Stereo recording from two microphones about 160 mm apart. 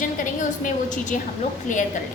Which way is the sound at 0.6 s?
55° left (ahead or behind).